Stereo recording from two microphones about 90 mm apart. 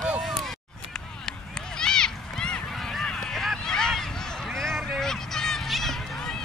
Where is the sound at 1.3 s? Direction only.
10° left (ahead or behind).